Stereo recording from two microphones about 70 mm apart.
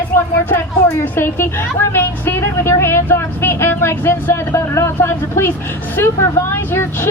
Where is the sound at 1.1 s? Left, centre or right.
Left.